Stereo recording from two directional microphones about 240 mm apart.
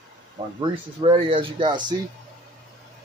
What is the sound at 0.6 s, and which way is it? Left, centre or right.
Speech, right.